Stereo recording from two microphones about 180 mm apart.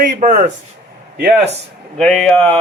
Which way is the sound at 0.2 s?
45° right (ahead or behind).